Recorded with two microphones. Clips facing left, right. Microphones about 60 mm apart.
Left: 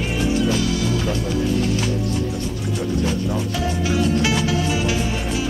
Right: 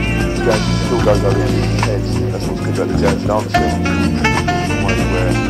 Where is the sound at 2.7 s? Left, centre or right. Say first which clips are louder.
Right 7 dB; right.